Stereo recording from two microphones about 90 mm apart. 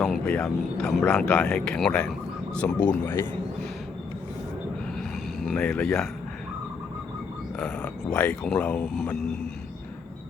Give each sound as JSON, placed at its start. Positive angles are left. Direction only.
{"t": 0.0, "sound": "a sound", "side_deg": 0}
{"t": 0.3, "sound": "speech", "side_deg": 5}
{"t": 2.8, "sound": "speech", "side_deg": 20}
{"t": 4.9, "sound": "a sound", "side_deg": 0}
{"t": 5.5, "sound": "speech", "side_deg": 10}
{"t": 7.6, "sound": "speech", "side_deg": 15}